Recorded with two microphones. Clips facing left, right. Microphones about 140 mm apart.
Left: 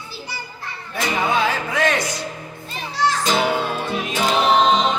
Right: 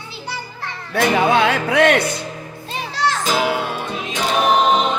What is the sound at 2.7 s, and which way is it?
Children playing, 90° right.